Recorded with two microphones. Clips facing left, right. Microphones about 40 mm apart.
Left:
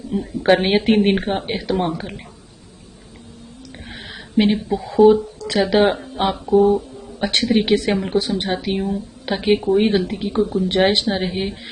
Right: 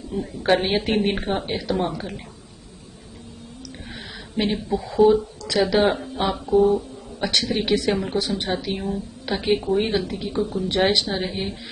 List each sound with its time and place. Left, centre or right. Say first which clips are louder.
0.4 s speech: left 5 dB; left
3.8 s a sound: left 4 dB; left
4.7 s speech: left 4 dB; centre
5.4 s speech: left 3 dB; left
6.3 s speech: left 3 dB; centre
7.2 s speech: left 5 dB; left
11.1 s speech: left 4 dB; left